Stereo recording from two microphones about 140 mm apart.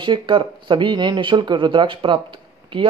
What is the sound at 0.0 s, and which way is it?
Speech, 35° right (ahead or behind).